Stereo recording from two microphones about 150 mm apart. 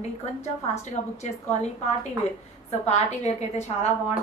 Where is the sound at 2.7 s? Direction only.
45° left (ahead or behind).